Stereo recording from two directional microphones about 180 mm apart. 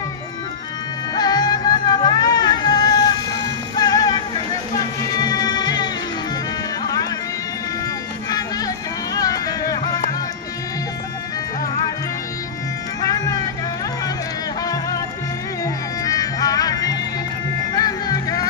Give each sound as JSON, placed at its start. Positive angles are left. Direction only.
{"t": 1.1, "sound": "music", "side_deg": 20}
{"t": 8.3, "sound": "music", "side_deg": 20}
{"t": 14.6, "sound": "music", "side_deg": 20}